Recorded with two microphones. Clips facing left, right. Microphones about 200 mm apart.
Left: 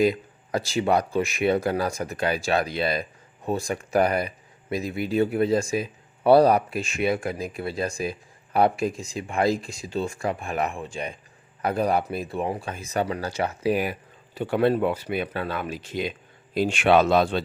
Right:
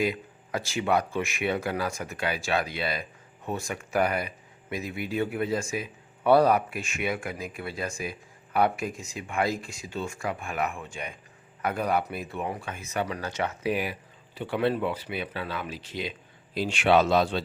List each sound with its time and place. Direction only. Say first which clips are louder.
0.0 s speech: left 6 dB; 40° left (ahead or behind)
14.3 s speech: left 5 dB; 45° left (ahead or behind)